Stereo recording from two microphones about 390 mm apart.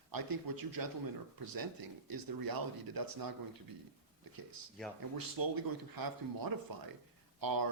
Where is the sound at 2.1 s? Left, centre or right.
Right.